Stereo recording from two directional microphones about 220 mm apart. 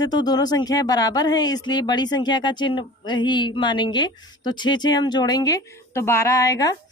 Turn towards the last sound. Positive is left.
turn(degrees=15)  # may be behind; listen again after turning